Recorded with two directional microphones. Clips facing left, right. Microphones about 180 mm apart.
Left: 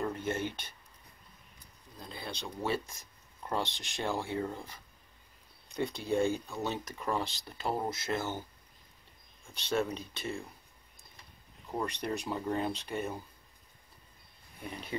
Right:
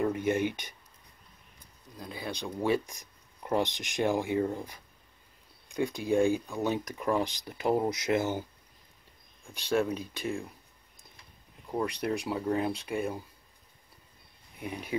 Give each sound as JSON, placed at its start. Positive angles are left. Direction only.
{"t": 0.0, "sound": "speech", "side_deg": -15}
{"t": 2.0, "sound": "speech", "side_deg": -10}
{"t": 9.5, "sound": "speech", "side_deg": -10}
{"t": 11.7, "sound": "speech", "side_deg": -10}
{"t": 14.6, "sound": "speech", "side_deg": -10}